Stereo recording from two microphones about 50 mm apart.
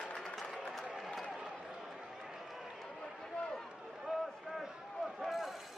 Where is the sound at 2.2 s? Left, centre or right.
Centre.